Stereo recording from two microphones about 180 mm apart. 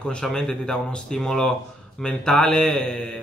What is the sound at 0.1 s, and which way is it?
Speech, 5° left (ahead or behind).